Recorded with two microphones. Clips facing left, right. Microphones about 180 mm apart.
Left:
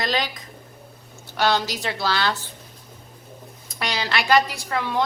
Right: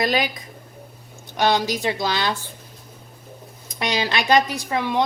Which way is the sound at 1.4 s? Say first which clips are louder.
Right 2 dB; 15° right (ahead or behind).